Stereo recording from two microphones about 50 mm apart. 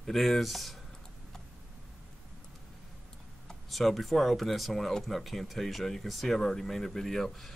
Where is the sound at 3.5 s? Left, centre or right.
Centre.